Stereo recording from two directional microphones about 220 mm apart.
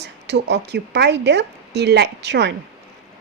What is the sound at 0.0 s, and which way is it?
Speech, 50° right (ahead or behind).